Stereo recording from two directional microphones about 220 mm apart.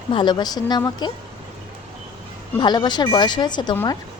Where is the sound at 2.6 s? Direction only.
20° left (ahead or behind).